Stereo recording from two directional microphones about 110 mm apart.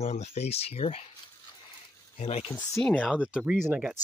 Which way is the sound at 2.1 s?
70° left (ahead or behind).